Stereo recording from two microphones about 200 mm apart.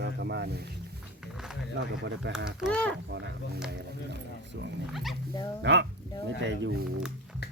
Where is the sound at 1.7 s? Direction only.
60° right (ahead or behind).